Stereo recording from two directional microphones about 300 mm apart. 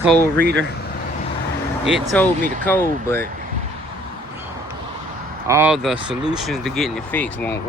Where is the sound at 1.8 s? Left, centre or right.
Centre.